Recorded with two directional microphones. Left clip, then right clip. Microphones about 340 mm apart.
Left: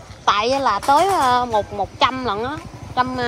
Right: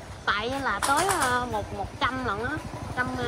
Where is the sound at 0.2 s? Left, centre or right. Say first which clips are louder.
Left 10 dB; centre.